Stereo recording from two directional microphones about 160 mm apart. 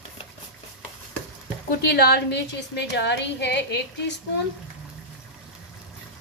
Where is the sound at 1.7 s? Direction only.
85° left.